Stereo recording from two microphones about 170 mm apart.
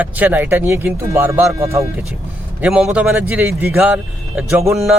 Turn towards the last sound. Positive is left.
turn(degrees=-15)  # may be behind; listen again after turning